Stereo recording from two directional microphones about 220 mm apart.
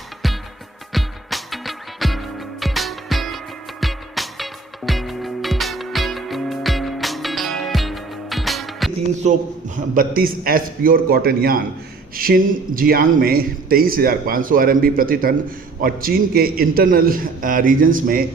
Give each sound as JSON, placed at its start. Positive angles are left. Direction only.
{"t": 0.9, "sound": "music", "side_deg": 0}
{"t": 9.2, "sound": "speech", "side_deg": -30}